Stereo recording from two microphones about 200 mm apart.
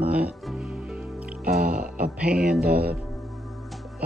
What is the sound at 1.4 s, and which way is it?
Music, 45° right (ahead or behind).